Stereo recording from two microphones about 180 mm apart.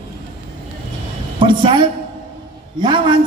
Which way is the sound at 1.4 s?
25° right (ahead or behind).